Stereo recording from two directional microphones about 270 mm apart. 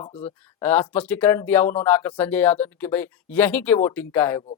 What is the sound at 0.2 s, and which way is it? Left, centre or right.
Speech, centre.